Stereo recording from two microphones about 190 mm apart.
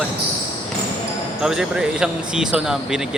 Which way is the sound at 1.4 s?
5° right (ahead or behind).